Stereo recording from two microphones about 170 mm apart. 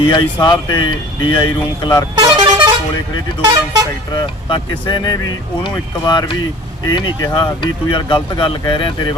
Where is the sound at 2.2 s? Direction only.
25° right (ahead or behind).